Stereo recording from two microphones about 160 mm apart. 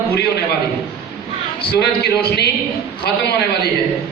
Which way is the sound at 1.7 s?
80° left.